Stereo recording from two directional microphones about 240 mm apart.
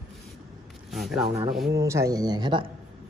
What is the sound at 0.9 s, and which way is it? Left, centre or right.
Speech, centre.